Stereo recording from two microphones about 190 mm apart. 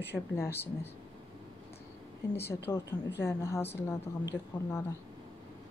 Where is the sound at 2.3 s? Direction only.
10° left (ahead or behind).